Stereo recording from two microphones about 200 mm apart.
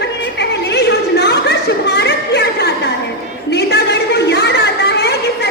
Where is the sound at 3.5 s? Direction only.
55° left (ahead or behind).